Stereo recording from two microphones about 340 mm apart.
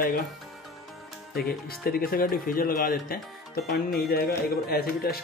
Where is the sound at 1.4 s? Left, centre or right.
Left.